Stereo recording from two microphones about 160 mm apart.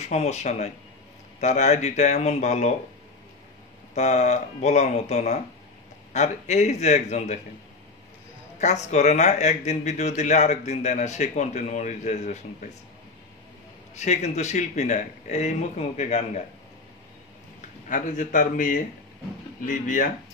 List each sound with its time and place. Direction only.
0.0 s speech: 45° left (ahead or behind)
3.9 s speech: 45° left (ahead or behind)
8.5 s speech: 45° left (ahead or behind)
13.9 s speech: 45° left (ahead or behind)
17.8 s speech: 50° left (ahead or behind)